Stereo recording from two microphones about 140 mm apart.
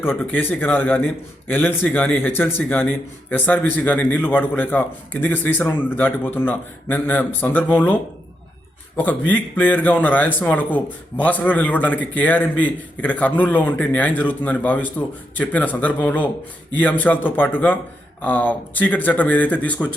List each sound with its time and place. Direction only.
0.0 s speech: 15° left (ahead or behind)
9.0 s speech: 10° left (ahead or behind)